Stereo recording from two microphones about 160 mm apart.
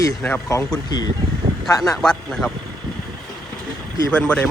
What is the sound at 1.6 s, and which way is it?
Speech, 20° left (ahead or behind).